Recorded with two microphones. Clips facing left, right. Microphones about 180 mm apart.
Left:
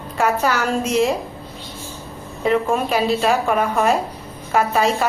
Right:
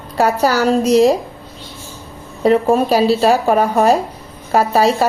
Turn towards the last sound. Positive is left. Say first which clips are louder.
# right 4 dB
turn(degrees=-35)  # may be behind; listen again after turning